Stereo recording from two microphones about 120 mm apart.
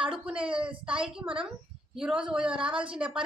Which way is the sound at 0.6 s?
10° right (ahead or behind).